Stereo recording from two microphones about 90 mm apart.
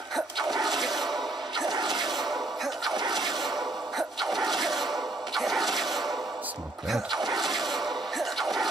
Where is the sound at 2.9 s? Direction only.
55° right (ahead or behind).